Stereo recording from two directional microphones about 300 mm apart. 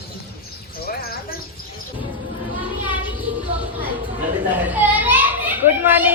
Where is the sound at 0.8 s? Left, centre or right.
Left.